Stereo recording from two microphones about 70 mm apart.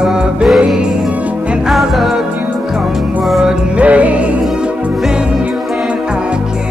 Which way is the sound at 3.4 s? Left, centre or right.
Centre.